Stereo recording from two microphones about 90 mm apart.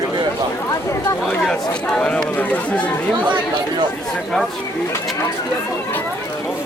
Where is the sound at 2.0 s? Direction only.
10° left (ahead or behind).